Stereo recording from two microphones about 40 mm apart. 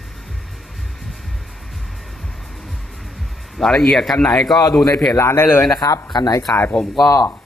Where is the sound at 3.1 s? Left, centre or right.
Centre.